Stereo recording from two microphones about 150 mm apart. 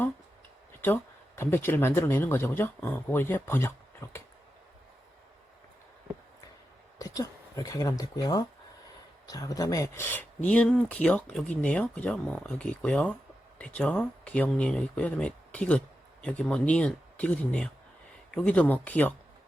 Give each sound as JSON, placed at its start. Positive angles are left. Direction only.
{"t": 0.7, "sound": "speech", "side_deg": 15}
{"t": 7.0, "sound": "speech", "side_deg": 20}